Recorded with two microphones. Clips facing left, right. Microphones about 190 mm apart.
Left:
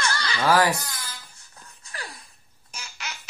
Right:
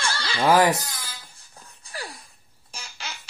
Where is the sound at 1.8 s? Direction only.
30° right (ahead or behind).